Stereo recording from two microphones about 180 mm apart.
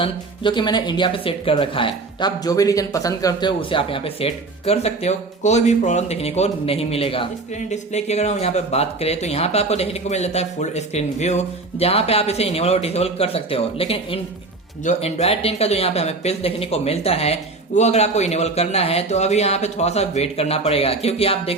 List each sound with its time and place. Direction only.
0.0 s speech: 25° left (ahead or behind)